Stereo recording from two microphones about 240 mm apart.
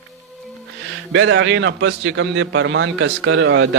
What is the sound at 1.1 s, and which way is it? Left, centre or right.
A man's voice, right.